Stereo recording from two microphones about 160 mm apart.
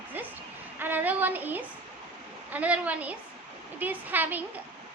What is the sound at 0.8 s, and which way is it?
A woman's voice, 10° right (ahead or behind).